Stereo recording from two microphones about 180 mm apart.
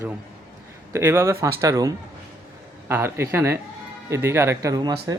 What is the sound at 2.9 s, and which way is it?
Speech, 15° right (ahead or behind).